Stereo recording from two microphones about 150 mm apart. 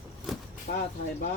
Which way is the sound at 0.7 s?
60° left (ahead or behind).